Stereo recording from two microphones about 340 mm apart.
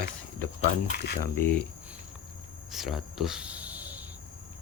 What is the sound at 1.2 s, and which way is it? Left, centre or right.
Speech, centre.